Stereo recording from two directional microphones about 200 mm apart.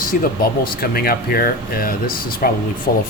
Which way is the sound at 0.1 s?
45° left (ahead or behind).